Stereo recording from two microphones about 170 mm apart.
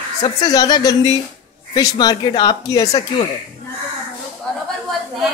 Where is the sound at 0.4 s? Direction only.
20° left (ahead or behind).